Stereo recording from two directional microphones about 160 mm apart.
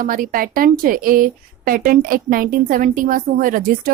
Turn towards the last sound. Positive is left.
turn(degrees=-60)  # may be behind; listen again after turning